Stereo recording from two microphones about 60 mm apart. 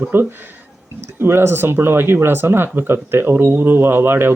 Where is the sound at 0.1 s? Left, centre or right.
Right.